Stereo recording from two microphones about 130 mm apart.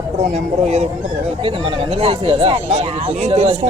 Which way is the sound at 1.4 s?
45° right (ahead or behind).